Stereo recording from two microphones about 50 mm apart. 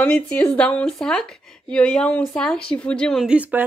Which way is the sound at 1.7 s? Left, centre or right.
Left.